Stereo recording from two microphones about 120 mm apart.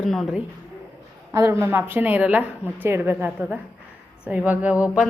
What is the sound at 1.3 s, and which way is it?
A woman's voice, 25° right (ahead or behind).